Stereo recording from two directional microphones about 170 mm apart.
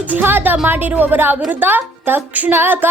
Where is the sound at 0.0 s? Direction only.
10° right (ahead or behind).